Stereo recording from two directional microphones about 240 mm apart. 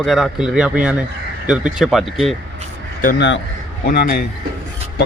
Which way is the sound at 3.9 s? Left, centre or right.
Left.